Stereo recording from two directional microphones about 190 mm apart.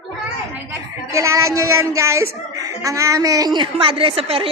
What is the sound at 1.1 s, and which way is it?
A woman's voice, 15° right (ahead or behind).